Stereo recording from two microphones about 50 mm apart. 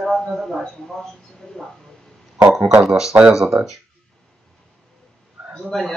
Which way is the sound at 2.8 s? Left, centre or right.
Centre.